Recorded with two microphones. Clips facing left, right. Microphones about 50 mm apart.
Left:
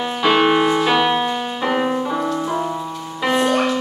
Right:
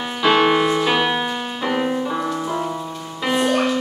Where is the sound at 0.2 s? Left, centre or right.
Centre.